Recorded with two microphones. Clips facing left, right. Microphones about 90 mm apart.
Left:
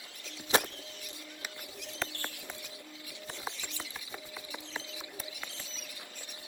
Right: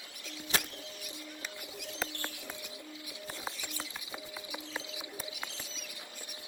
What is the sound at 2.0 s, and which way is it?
Bird, 15° right (ahead or behind).